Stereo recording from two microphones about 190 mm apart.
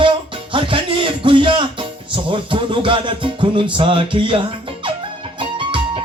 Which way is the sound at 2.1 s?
25° right (ahead or behind).